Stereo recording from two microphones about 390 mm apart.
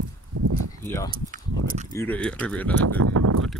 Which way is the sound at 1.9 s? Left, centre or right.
Centre.